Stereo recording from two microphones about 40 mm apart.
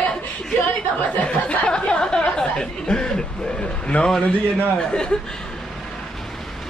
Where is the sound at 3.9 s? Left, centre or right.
Left.